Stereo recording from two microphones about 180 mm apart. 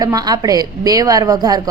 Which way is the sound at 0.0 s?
20° right (ahead or behind).